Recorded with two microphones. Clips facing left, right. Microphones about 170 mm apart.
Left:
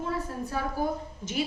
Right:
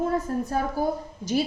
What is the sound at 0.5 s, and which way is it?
Speech, 40° right (ahead or behind).